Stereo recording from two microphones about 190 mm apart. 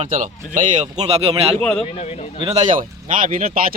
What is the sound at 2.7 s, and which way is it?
Speech, 45° right (ahead or behind).